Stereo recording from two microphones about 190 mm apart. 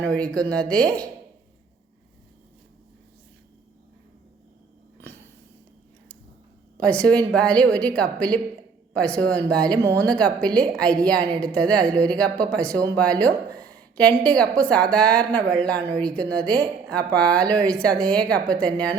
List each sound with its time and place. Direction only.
0.0 s a woman's voice: 5° left (ahead or behind)
6.7 s a woman's voice: 5° left (ahead or behind)
9.8 s speech: 15° right (ahead or behind)
10.4 s a woman's voice: 5° left (ahead or behind)
12.7 s speech: 20° right (ahead or behind)
13.9 s a woman's voice: 5° left (ahead or behind)